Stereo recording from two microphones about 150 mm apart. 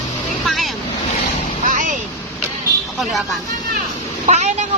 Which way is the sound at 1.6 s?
60° right (ahead or behind).